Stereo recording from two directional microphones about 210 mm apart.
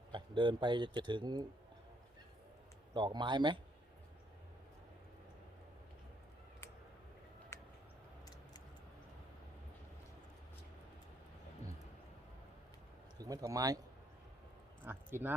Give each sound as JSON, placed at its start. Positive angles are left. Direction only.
{"t": 0.1, "sound": "speech", "side_deg": -20}
{"t": 2.9, "sound": "speech", "side_deg": -20}
{"t": 7.5, "sound": "a sound", "side_deg": 10}
{"t": 13.1, "sound": "speech", "side_deg": -15}
{"t": 14.8, "sound": "speech", "side_deg": -10}